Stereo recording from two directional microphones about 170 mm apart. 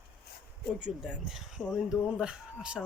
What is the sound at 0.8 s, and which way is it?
Speech, 5° right (ahead or behind).